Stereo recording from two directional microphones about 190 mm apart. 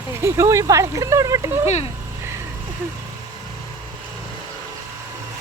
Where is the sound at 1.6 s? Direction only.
35° left (ahead or behind).